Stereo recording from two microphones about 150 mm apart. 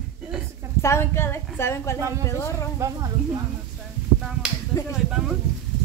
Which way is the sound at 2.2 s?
20° left (ahead or behind).